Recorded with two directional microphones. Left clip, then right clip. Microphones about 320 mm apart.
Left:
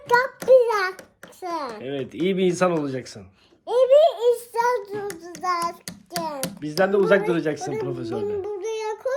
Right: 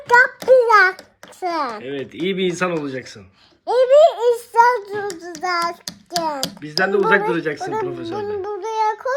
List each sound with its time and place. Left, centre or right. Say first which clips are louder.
0.1 s child singing: right 4 dB; right
1.8 s speech: right 1 dB; centre
3.7 s child singing: right 4 dB; right
6.1 s a sound: right 7 dB; centre
6.6 s speech: right 1 dB; centre
8.4 s child singing: right 6 dB; centre